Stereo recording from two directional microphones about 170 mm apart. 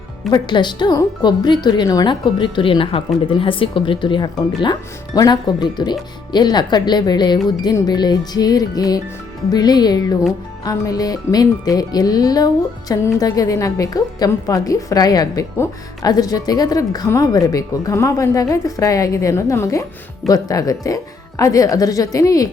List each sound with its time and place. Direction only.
0.3 s speech: 25° left (ahead or behind)